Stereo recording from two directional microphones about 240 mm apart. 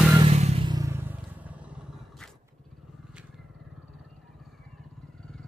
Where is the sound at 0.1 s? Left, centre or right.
Right; by 1.6 s centre.